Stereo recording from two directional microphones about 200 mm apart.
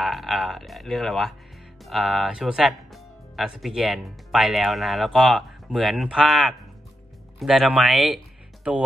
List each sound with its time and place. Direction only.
0.0 s speech: centre (ahead or behind)